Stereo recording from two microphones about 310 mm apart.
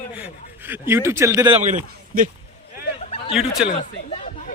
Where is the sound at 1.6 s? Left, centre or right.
Right.